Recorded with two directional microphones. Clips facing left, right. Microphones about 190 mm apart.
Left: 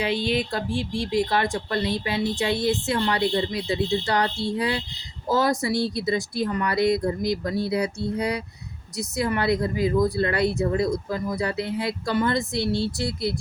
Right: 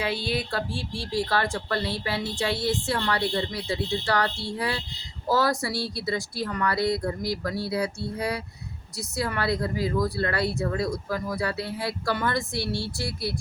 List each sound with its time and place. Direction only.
0.0 s speech: 20° left (ahead or behind)